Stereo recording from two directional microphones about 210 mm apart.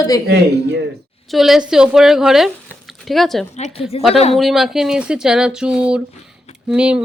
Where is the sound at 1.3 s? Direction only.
Centre (ahead or behind).